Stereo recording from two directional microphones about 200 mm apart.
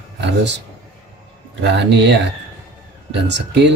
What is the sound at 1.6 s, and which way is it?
Speech, 60° right (ahead or behind).